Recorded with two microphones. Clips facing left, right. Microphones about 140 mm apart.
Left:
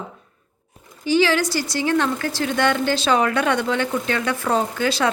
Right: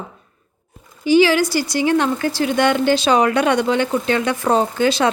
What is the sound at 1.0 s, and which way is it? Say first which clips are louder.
A woman's voice: right 5 dB; 10° right (ahead or behind).